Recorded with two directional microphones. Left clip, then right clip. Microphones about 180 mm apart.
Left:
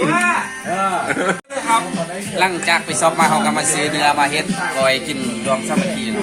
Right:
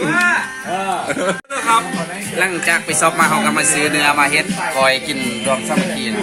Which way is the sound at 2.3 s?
10° right (ahead or behind).